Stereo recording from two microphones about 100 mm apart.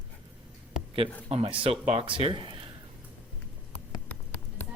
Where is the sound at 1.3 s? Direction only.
90° right; by 2.5 s 55° right (ahead or behind).